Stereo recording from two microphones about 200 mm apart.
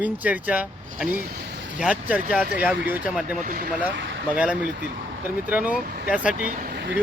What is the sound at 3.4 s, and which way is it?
Speech, 45° right (ahead or behind).